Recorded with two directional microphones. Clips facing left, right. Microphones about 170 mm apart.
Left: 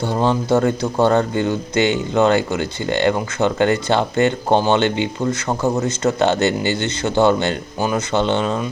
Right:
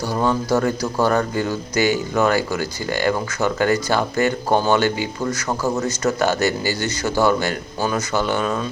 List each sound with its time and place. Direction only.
0.1 s speech: 25° left (ahead or behind)